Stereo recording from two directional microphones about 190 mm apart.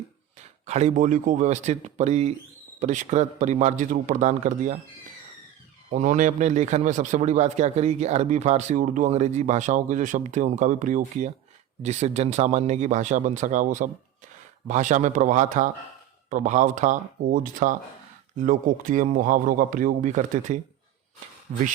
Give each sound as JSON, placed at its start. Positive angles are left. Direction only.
{"t": 0.3, "sound": "a man's voice", "side_deg": -35}
{"t": 5.9, "sound": "a man's voice", "side_deg": -40}